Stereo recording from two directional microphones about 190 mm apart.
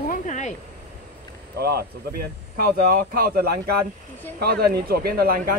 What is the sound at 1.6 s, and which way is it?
Speech, 55° right (ahead or behind).